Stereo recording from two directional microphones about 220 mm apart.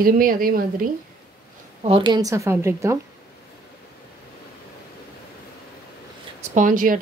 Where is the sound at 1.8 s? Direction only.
25° right (ahead or behind).